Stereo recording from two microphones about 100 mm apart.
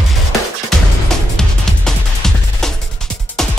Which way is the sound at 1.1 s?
5° left (ahead or behind).